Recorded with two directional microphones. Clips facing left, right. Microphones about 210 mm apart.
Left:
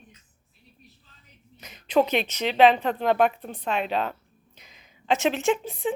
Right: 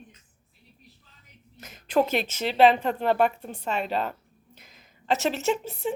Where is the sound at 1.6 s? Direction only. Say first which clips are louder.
Left 2 dB; 5° right (ahead or behind).